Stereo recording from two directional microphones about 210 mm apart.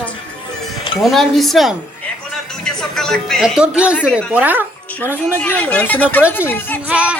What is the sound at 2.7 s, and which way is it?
A woman's voice, centre (ahead or behind).